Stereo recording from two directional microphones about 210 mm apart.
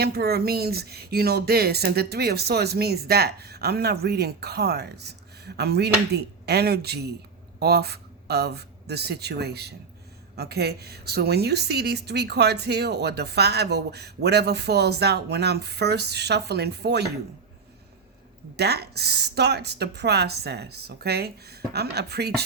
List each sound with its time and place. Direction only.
0.0 s speech: 50° right (ahead or behind)
18.5 s speech: 50° right (ahead or behind)